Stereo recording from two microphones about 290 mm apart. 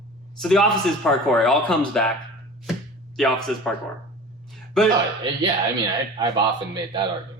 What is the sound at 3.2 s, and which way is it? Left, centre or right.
Speech, centre.